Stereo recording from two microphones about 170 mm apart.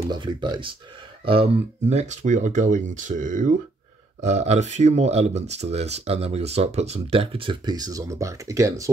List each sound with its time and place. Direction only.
0.1 s speech: 25° right (ahead or behind)